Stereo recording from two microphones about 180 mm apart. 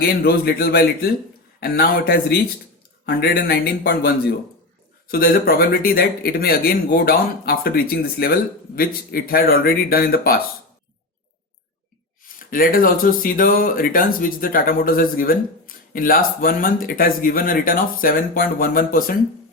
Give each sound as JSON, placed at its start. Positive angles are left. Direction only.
{"t": 0.0, "sound": "speech", "side_deg": 60}
{"t": 12.4, "sound": "speech", "side_deg": 50}